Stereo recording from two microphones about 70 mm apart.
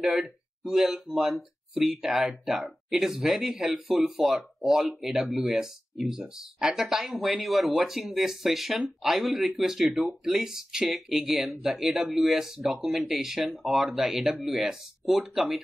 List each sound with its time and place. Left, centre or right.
0.0 s speech: centre